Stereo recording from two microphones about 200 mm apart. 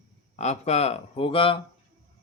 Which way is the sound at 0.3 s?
35° left (ahead or behind).